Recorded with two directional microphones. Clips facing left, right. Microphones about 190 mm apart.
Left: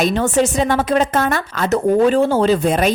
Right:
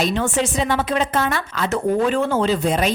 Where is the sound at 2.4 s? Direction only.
50° left (ahead or behind).